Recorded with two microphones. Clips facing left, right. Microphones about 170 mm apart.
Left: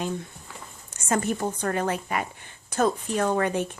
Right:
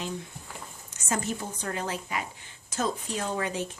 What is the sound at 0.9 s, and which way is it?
A woman's voice, 55° left (ahead or behind).